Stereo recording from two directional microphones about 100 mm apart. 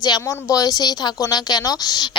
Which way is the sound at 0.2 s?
30° left (ahead or behind).